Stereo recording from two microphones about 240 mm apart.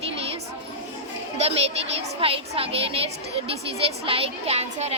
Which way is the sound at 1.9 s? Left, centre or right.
Right.